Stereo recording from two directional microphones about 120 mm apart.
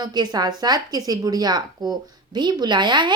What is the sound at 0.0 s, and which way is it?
Speech, 35° right (ahead or behind).